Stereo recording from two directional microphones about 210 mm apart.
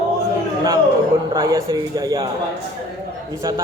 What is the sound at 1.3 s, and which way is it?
Speech, 15° right (ahead or behind).